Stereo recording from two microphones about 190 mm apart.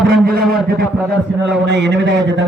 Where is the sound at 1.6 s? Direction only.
65° right (ahead or behind).